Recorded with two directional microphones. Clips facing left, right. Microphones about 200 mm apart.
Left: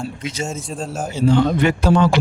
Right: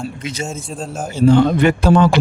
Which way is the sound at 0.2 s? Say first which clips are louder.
Right 1 dB; 60° right (ahead or behind).